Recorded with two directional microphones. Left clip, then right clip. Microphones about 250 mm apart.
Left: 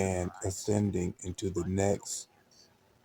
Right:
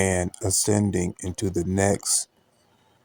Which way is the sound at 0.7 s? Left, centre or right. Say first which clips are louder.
Right 4 dB; right.